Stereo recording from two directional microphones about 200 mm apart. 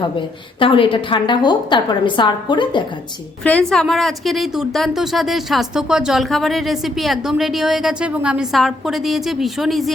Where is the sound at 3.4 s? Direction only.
5° left (ahead or behind).